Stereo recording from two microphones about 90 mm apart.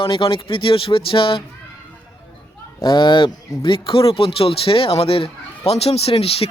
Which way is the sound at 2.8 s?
65° left (ahead or behind).